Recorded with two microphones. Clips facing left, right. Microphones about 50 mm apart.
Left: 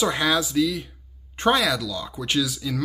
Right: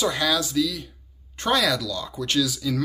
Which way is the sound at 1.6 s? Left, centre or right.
Centre.